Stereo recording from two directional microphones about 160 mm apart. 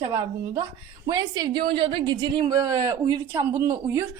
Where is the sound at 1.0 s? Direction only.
25° right (ahead or behind).